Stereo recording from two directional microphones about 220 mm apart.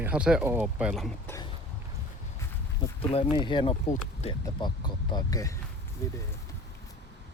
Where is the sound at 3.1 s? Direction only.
25° left (ahead or behind).